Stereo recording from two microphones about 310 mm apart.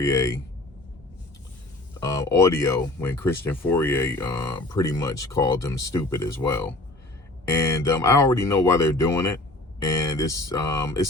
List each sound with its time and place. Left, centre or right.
0.0 s speech: centre
2.0 s speech: centre